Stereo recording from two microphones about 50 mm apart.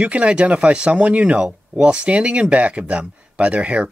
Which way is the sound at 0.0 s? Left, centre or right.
Right.